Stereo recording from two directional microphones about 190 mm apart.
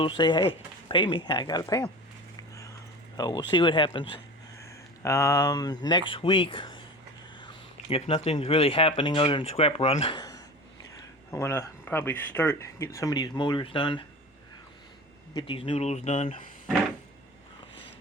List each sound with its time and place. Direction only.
0.0 s speech: 25° left (ahead or behind)
3.2 s speech: 20° left (ahead or behind)
4.6 s speech: 15° left (ahead or behind); by 10.2 s 30° left (ahead or behind)
10.2 s a sound: 20° left (ahead or behind)
11.3 s speech: 15° left (ahead or behind)
15.4 s speech: 30° left (ahead or behind)